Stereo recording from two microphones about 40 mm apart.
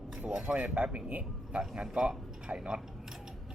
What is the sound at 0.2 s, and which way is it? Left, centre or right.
A man's voice, right.